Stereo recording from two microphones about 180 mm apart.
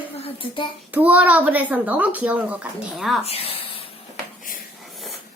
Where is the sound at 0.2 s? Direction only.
30° left (ahead or behind).